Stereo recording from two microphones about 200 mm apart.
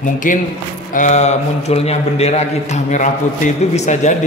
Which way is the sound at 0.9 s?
35° left (ahead or behind).